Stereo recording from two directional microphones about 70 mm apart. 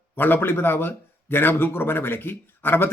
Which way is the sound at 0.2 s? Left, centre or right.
Left.